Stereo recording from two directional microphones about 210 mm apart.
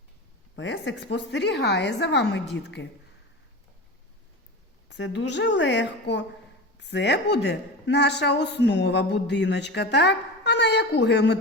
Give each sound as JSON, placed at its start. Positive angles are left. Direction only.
{"t": 0.5, "sound": "a woman's voice", "side_deg": 55}
{"t": 4.9, "sound": "a woman's voice", "side_deg": 55}